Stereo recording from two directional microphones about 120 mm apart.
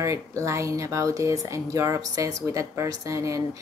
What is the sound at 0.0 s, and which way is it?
Speech, 25° right (ahead or behind).